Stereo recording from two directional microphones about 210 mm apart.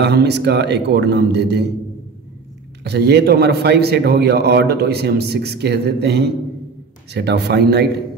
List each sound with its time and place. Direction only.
0.0 s a man's voice: 50° right (ahead or behind)
2.8 s a man's voice: 50° right (ahead or behind)